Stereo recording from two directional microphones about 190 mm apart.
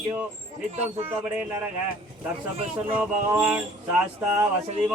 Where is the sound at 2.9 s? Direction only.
10° right (ahead or behind).